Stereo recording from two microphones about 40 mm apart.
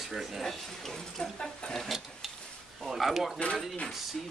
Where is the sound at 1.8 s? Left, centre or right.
Centre.